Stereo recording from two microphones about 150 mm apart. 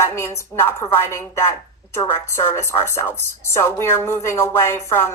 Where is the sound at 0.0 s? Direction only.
20° left (ahead or behind).